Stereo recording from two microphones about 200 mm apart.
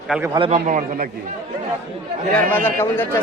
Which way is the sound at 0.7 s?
40° right (ahead or behind).